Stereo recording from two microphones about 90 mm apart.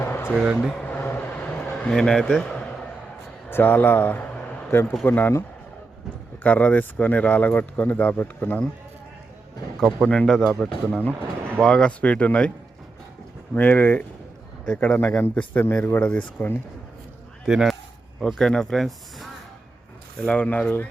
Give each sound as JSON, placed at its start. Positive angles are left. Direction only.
{"t": 0.0, "sound": "a sound", "side_deg": 25}
{"t": 0.5, "sound": "speech", "side_deg": 5}
{"t": 0.9, "sound": "vehicle", "side_deg": 20}
{"t": 1.9, "sound": "speech", "side_deg": 5}
{"t": 3.5, "sound": "a man's voice", "side_deg": 20}
{"t": 4.7, "sound": "speech", "side_deg": 25}
{"t": 10.1, "sound": "speech", "side_deg": 10}
{"t": 13.5, "sound": "speech", "side_deg": 15}
{"t": 17.4, "sound": "speech", "side_deg": 0}
{"t": 20.2, "sound": "speech", "side_deg": 15}